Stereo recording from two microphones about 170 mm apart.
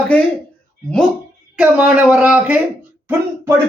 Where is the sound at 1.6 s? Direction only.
5° right (ahead or behind).